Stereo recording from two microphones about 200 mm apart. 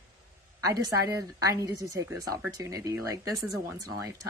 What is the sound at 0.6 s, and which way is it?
A woman's voice, 15° right (ahead or behind).